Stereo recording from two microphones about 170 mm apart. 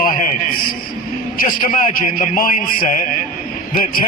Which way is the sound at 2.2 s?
50° left (ahead or behind).